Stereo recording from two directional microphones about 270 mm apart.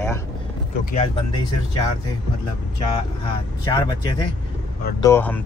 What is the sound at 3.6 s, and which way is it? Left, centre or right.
A man's voice, centre.